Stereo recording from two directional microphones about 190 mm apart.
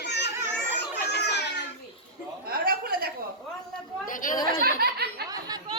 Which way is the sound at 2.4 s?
50° right (ahead or behind).